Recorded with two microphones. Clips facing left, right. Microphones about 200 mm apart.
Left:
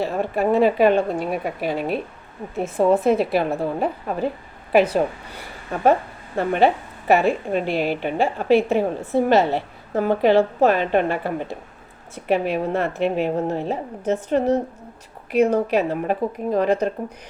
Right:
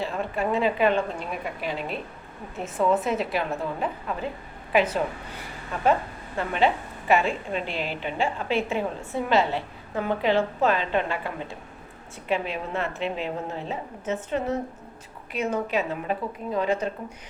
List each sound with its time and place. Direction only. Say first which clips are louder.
0.0 s a woman's voice: left 6 dB; 45° left (ahead or behind)
6.3 s a woman's voice: left 6 dB; 50° left (ahead or behind)
12.5 s a woman's voice: left 8 dB; 45° left (ahead or behind)